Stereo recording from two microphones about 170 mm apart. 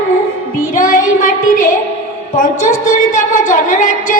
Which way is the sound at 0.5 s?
50° left (ahead or behind).